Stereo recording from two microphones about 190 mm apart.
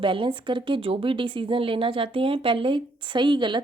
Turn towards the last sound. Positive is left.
turn(degrees=-25)  # may be behind; listen again after turning